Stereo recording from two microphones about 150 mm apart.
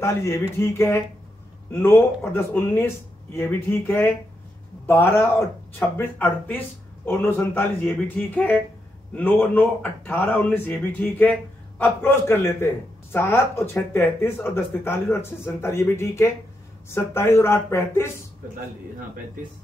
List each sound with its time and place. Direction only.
0.0 s speech: 20° left (ahead or behind)